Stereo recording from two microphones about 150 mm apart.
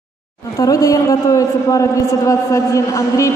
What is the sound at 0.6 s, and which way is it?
A man's voice, 25° left (ahead or behind).